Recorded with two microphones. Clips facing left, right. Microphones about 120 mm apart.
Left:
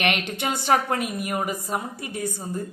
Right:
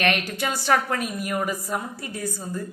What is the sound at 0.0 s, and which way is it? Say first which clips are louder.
A woman's voice: right 1 dB; 20° left (ahead or behind).